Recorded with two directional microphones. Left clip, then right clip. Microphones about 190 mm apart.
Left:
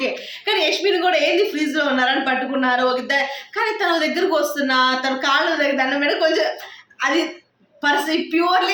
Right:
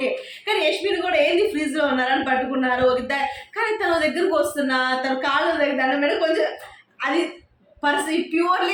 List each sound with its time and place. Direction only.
0.0 s a woman's voice: 20° left (ahead or behind)
7.8 s a woman's voice: 20° left (ahead or behind)